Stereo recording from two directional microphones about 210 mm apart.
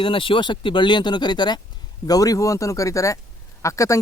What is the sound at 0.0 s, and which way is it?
Speech, 25° left (ahead or behind).